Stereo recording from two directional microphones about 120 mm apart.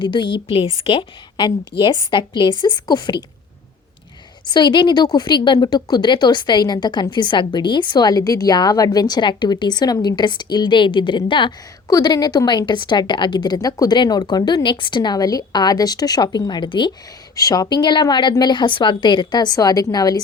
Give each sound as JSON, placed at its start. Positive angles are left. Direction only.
{"t": 0.0, "sound": "a woman's voice", "side_deg": 45}
{"t": 4.4, "sound": "a woman's voice", "side_deg": 40}
{"t": 11.9, "sound": "a woman's voice", "side_deg": 30}
{"t": 17.3, "sound": "a woman's voice", "side_deg": 30}